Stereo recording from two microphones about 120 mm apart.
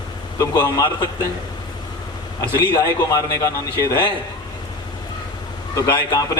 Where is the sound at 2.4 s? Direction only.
30° left (ahead or behind).